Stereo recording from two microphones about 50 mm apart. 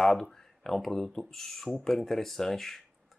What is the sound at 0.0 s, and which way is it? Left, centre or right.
Speech, centre.